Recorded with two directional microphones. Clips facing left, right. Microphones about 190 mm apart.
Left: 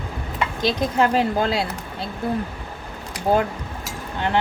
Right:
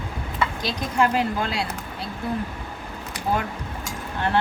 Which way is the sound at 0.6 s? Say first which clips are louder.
Left 4 dB; 25° left (ahead or behind).